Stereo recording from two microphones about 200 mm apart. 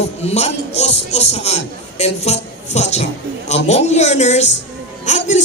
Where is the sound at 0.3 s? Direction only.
30° left (ahead or behind).